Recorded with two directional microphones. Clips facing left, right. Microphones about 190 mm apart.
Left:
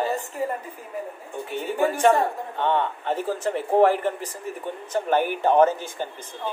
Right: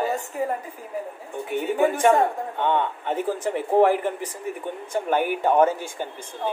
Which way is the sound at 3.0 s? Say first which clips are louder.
Even; 10° right (ahead or behind).